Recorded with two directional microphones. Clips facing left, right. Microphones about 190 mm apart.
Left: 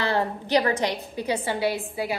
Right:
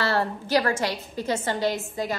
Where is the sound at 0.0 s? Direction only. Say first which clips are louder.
Even; 15° left (ahead or behind).